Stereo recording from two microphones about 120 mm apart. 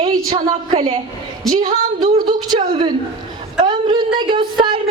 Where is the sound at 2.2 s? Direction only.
40° right (ahead or behind).